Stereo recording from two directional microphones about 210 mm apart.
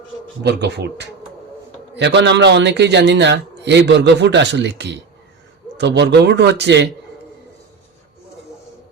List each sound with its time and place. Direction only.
0.4 s a man's voice: 55° right (ahead or behind)